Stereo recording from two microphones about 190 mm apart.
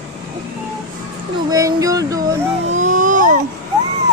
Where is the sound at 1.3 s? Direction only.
20° right (ahead or behind).